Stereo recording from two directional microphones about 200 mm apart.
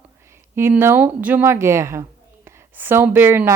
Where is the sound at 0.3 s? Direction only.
10° right (ahead or behind).